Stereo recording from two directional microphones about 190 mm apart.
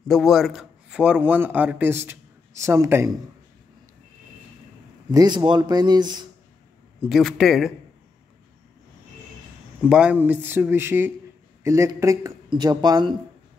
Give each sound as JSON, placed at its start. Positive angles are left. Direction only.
{"t": 0.1, "sound": "a man's voice", "side_deg": 0}
{"t": 5.1, "sound": "speech", "side_deg": -20}
{"t": 7.0, "sound": "a man's voice", "side_deg": 0}
{"t": 9.8, "sound": "speech", "side_deg": -5}